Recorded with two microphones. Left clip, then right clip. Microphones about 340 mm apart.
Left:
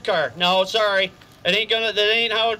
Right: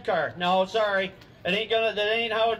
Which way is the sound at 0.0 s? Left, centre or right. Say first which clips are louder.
Left 5 dB; left.